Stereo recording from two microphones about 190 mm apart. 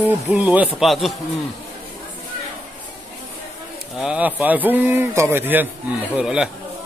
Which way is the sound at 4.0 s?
5° right (ahead or behind).